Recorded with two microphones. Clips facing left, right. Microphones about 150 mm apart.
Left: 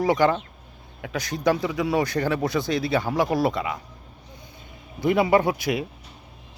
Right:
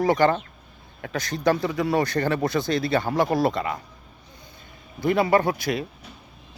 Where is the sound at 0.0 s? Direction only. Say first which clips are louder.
Right 1 dB; 10° left (ahead or behind).